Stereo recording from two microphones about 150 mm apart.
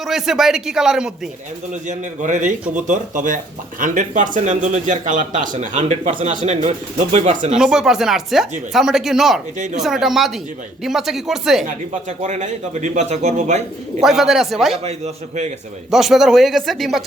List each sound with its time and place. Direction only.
0.0 s speech: centre (ahead or behind)
1.9 s speech: 55° right (ahead or behind)
7.5 s speech: 5° right (ahead or behind)
11.6 s a man's voice: 55° right (ahead or behind)
14.0 s speech: centre (ahead or behind)
14.8 s a man's voice: 45° right (ahead or behind)
15.9 s speech: centre (ahead or behind)